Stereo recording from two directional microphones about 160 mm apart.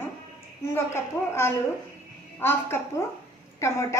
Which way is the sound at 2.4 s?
15° left (ahead or behind).